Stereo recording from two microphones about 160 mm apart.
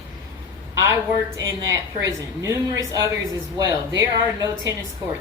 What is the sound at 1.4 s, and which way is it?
A woman's voice, 20° right (ahead or behind).